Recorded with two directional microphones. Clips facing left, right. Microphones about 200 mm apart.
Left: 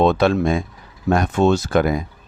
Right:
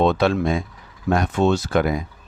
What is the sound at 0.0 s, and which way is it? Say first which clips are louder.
Speech: left 2 dB; 50° left (ahead or behind).